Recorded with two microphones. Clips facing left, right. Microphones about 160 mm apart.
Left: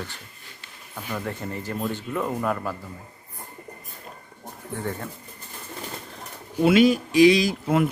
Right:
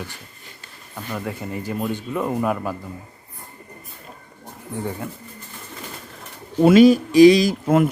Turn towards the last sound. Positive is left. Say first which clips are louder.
# right 4 dB
turn(degrees=-50)  # may be behind; listen again after turning